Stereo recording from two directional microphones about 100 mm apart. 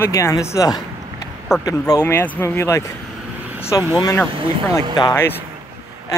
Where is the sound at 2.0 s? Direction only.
25° left (ahead or behind).